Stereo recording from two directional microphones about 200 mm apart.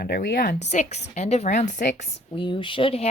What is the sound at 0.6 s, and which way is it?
Speech, 35° left (ahead or behind).